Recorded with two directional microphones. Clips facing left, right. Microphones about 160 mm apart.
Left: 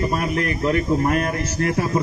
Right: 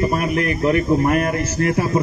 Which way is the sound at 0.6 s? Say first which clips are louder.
Right 3 dB; 30° right (ahead or behind).